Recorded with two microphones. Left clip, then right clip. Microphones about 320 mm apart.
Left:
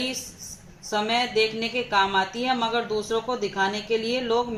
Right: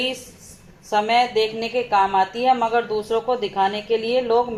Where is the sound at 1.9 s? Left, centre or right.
Right.